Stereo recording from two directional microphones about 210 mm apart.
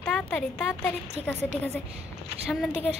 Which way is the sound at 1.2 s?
30° right (ahead or behind).